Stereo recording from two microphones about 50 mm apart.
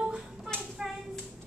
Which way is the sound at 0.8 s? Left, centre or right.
Centre.